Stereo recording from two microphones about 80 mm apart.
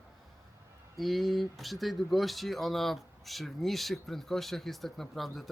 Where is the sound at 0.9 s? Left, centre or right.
Centre.